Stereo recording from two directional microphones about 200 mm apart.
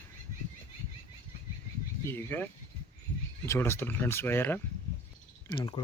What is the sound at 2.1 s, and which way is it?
Speech, 10° left (ahead or behind).